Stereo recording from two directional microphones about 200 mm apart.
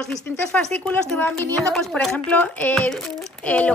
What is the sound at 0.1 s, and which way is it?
Speech, 5° left (ahead or behind).